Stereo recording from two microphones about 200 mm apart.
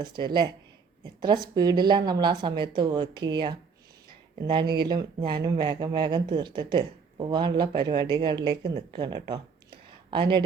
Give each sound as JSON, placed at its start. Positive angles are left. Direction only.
{"t": 0.0, "sound": "a woman's voice", "side_deg": -20}